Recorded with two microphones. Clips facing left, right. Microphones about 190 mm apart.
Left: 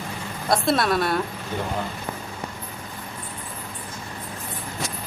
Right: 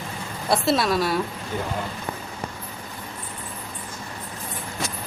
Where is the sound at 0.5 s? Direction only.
5° right (ahead or behind).